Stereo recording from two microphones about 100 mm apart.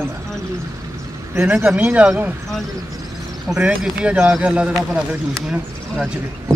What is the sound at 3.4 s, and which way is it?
A man's voice, 5° right (ahead or behind).